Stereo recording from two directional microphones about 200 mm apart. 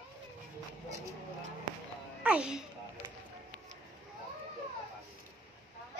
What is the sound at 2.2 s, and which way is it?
Speech, 5° right (ahead or behind).